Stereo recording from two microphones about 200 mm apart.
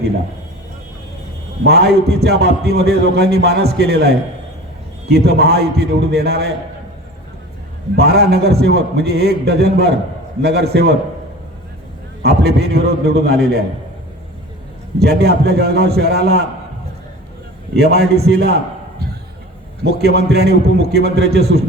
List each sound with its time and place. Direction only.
1.6 s a man's voice: 55° right (ahead or behind)
7.9 s a man's voice: 55° right (ahead or behind)
12.2 s a man's voice: 55° right (ahead or behind)
14.9 s a man's voice: 55° right (ahead or behind)
17.7 s a man's voice: 55° right (ahead or behind)
19.8 s a man's voice: 55° right (ahead or behind)